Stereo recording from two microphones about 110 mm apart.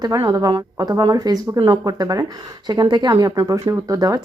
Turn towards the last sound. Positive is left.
turn(degrees=-35)  # may be behind; listen again after turning